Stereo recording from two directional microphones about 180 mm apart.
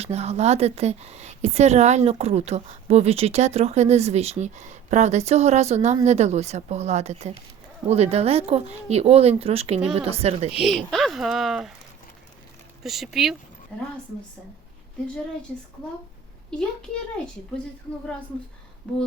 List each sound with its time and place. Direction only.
0.0 s speech: 35° right (ahead or behind)
10.6 s speech: centre (ahead or behind)
12.8 s speech: centre (ahead or behind)